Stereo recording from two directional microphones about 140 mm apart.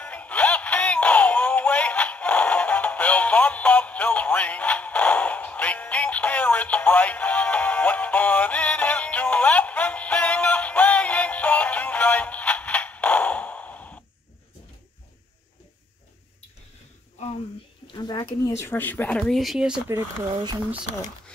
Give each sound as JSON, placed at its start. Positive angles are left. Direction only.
{"t": 0.0, "sound": "synthetic singing", "side_deg": 10}
{"t": 17.9, "sound": "a sound", "side_deg": 30}
{"t": 18.4, "sound": "speech", "side_deg": 15}